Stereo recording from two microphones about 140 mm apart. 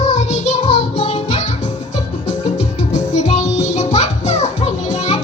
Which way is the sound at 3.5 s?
55° left (ahead or behind).